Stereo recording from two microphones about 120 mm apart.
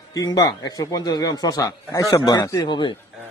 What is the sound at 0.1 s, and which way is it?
Speech, 30° left (ahead or behind).